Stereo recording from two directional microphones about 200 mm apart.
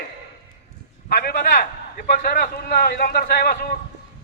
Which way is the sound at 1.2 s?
40° left (ahead or behind).